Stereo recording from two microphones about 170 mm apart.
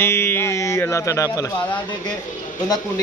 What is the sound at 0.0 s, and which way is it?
Speech, 15° left (ahead or behind).